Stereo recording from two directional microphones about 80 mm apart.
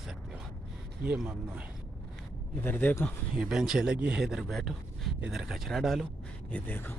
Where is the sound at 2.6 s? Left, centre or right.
Left.